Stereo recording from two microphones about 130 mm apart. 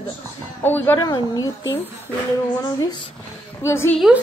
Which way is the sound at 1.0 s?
30° left (ahead or behind).